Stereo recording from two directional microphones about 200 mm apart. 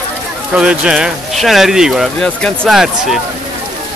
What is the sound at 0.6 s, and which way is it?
Speech, 5° right (ahead or behind).